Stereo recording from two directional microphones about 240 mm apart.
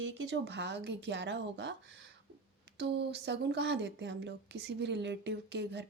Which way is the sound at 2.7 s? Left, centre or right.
Right.